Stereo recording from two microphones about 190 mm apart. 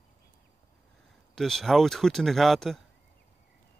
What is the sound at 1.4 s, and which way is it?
Speech, centre (ahead or behind).